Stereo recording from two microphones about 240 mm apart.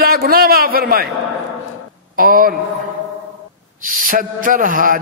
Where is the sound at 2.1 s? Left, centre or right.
Right.